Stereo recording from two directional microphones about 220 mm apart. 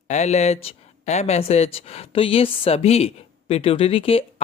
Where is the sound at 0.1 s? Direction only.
30° left (ahead or behind).